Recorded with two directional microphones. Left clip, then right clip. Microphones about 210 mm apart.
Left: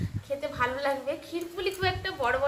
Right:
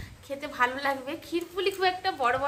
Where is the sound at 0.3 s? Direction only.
45° right (ahead or behind).